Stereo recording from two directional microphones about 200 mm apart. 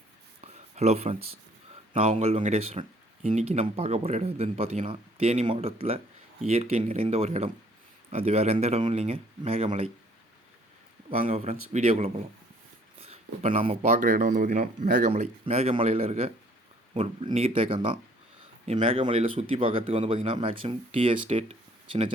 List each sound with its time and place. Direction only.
0.4 s a sound: 35° right (ahead or behind)
1.9 s speech: 35° right (ahead or behind)
11.1 s speech: 30° right (ahead or behind)